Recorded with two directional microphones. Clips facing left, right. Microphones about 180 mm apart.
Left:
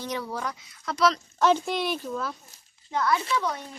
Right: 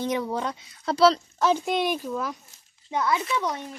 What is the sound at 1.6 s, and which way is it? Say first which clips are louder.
A child's voice: right 3 dB; 15° right (ahead or behind).